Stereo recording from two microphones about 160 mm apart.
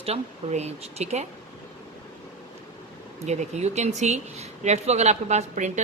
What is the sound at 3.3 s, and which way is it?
A woman's voice, 45° right (ahead or behind).